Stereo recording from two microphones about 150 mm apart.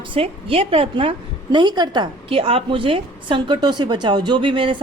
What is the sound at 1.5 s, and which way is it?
A woman's voice, 30° right (ahead or behind).